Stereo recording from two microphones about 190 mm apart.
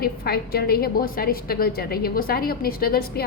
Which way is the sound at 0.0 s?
55° left (ahead or behind).